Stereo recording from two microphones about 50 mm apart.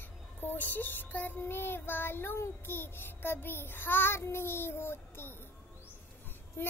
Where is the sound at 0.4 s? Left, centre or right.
Left.